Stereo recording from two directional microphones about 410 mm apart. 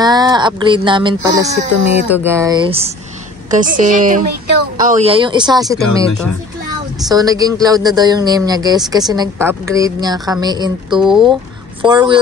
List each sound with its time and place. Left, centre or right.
0.0 s a woman's voice: centre